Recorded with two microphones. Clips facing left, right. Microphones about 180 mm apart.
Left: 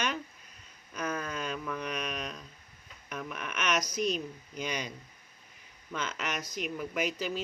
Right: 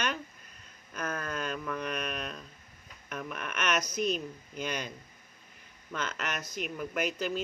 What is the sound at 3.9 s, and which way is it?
Speech, 50° right (ahead or behind).